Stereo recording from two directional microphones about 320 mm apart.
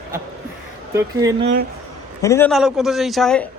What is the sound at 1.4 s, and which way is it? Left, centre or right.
Speech, right.